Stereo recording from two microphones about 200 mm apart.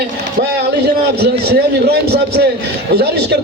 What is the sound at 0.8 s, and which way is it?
A man's voice, 55° right (ahead or behind).